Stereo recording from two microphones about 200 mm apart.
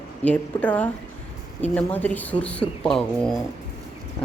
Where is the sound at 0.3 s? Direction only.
5° left (ahead or behind).